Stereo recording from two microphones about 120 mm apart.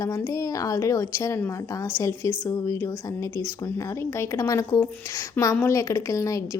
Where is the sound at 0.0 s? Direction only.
25° left (ahead or behind).